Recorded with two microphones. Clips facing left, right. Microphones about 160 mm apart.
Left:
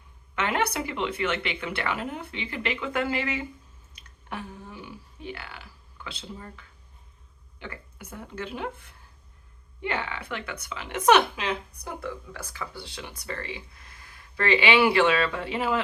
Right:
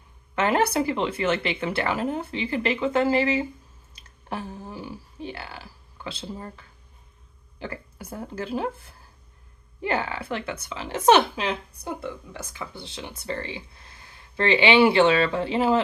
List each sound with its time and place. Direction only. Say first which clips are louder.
0.3 s speech: right 5 dB; 35° right (ahead or behind)
3.9 s a sound: right 4 dB; 35° right (ahead or behind)
7.6 s a woman's voice: right 6 dB; 35° right (ahead or behind)